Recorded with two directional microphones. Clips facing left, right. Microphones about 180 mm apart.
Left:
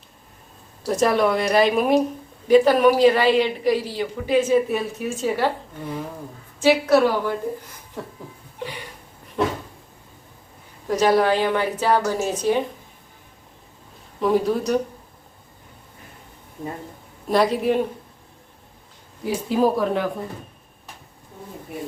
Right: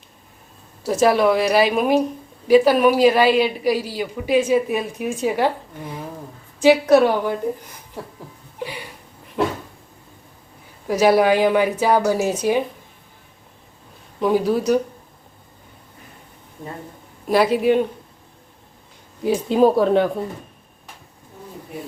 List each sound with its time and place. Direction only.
0.9 s a woman's voice: 5° right (ahead or behind)
6.6 s a woman's voice: 15° right (ahead or behind)
8.6 s a sound: 10° right (ahead or behind)
10.8 s a woman's voice: 10° right (ahead or behind)
14.2 s a woman's voice: centre (ahead or behind)
17.2 s a woman's voice: 5° right (ahead or behind)
19.2 s speech: 20° right (ahead or behind)